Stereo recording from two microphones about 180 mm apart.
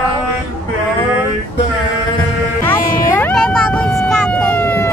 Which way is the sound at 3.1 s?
10° left (ahead or behind).